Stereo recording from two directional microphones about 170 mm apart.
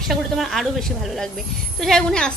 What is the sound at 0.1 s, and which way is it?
A woman's voice, centre (ahead or behind).